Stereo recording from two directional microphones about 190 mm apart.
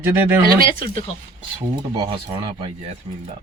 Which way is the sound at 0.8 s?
30° left (ahead or behind).